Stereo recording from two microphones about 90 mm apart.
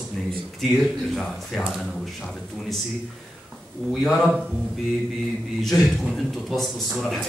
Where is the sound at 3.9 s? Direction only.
Centre (ahead or behind).